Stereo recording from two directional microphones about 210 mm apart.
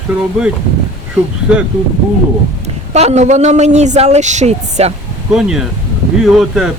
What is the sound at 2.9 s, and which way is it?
A woman's voice, 30° right (ahead or behind).